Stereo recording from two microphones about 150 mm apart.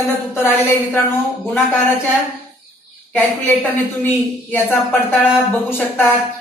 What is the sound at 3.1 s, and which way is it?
A man's voice, 10° left (ahead or behind).